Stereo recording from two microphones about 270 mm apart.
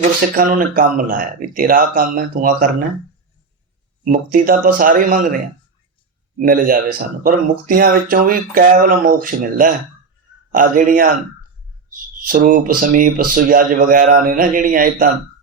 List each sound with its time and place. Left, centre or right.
0.3 s speech: right
4.1 s speech: right
6.4 s speech: right
12.2 s speech: right